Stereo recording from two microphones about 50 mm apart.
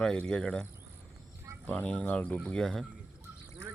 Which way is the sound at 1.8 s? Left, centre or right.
Left.